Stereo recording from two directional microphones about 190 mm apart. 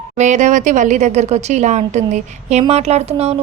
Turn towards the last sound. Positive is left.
turn(degrees=-35)  # may be behind; listen again after turning